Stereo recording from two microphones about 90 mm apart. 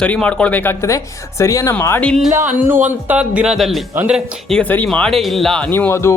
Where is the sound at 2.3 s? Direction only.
25° right (ahead or behind); by 5.6 s 5° left (ahead or behind).